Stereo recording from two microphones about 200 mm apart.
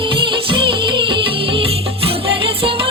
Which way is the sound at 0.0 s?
25° right (ahead or behind).